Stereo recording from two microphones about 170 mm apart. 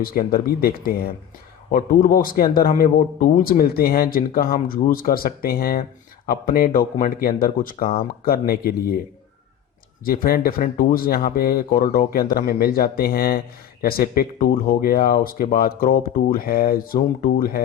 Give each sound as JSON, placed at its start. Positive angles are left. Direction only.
{"t": 0.0, "sound": "speech", "side_deg": 60}
{"t": 10.0, "sound": "speech", "side_deg": 60}